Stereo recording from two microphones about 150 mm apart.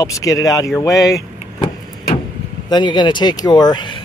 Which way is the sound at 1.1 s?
20° left (ahead or behind).